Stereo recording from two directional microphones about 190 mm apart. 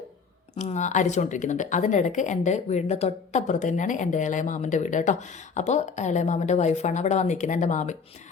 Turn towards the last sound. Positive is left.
turn(degrees=40)  # may be behind; listen again after turning